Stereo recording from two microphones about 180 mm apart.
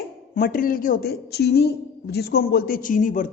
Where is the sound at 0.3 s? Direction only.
50° left (ahead or behind).